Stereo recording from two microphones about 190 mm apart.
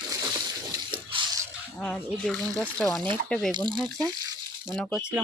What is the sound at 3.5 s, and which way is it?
Speech, 25° right (ahead or behind).